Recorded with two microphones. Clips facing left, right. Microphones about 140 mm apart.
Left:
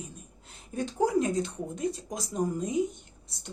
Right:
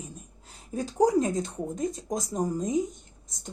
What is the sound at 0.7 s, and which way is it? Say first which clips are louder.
A woman's voice: right 3 dB; 40° right (ahead or behind).